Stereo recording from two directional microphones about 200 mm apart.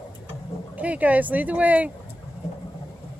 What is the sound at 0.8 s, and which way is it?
Speech, 5° right (ahead or behind).